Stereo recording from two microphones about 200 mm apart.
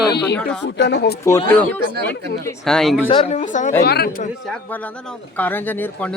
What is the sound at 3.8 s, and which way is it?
Speech, 50° left (ahead or behind).